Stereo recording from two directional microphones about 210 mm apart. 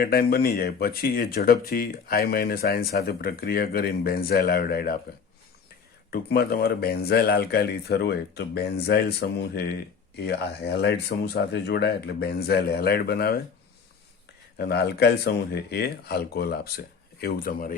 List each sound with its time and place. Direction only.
0.0 s speech: 45° left (ahead or behind)
6.1 s speech: 50° left (ahead or behind)
14.6 s speech: 50° left (ahead or behind)